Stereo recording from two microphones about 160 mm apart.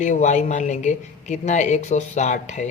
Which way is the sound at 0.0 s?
50° left (ahead or behind).